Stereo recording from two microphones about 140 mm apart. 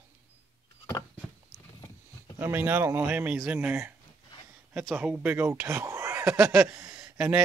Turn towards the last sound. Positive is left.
turn(degrees=-10)  # may be behind; listen again after turning